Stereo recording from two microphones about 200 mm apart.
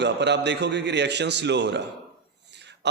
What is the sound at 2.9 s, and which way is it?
Speech, 60° right (ahead or behind).